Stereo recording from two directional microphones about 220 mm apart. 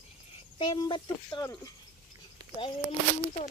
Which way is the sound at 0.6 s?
20° left (ahead or behind).